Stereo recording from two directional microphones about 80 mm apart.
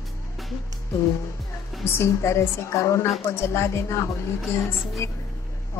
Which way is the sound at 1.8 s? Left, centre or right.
Left.